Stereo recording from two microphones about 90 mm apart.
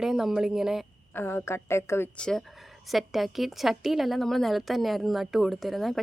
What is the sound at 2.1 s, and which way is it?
Speech, 10° left (ahead or behind).